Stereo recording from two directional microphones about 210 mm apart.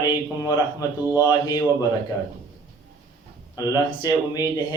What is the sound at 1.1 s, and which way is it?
Speech, 20° left (ahead or behind).